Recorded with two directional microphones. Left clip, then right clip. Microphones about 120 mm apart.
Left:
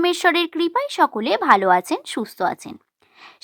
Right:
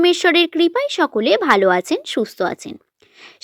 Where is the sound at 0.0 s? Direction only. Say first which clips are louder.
Right 4 dB; 10° right (ahead or behind).